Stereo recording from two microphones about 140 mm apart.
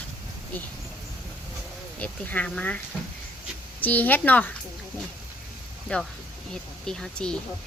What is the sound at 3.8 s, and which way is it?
Speech, 10° left (ahead or behind).